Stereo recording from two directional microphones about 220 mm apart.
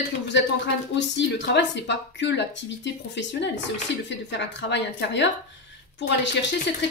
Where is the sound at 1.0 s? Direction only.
55° left (ahead or behind).